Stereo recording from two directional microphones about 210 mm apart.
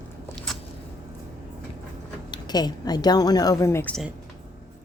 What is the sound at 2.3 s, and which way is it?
A woman's voice, 20° left (ahead or behind).